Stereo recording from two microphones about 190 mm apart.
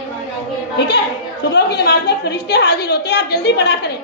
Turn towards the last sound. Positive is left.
turn(degrees=60)  # may be behind; listen again after turning